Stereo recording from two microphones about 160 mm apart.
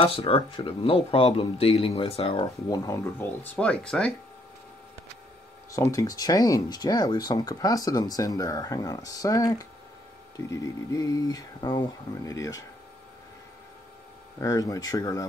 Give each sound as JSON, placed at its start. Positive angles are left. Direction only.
{"t": 0.0, "sound": "speech", "side_deg": 35}
{"t": 2.8, "sound": "speech", "side_deg": 20}
{"t": 5.7, "sound": "speech", "side_deg": 20}
{"t": 14.4, "sound": "speech", "side_deg": 20}